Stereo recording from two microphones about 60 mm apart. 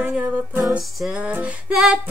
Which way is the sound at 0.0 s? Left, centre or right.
Right.